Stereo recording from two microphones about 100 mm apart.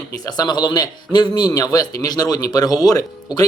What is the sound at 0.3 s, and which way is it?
Speech, 45° left (ahead or behind).